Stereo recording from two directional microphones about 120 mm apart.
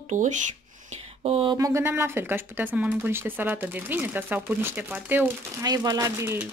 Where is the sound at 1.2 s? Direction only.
55° right (ahead or behind).